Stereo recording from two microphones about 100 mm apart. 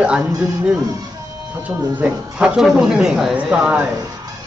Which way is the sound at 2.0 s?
10° right (ahead or behind).